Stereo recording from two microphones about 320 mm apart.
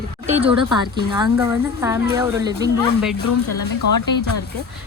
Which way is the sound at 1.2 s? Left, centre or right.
Centre.